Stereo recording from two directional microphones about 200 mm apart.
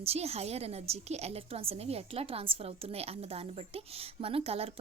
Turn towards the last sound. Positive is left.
turn(degrees=-30)  # may be behind; listen again after turning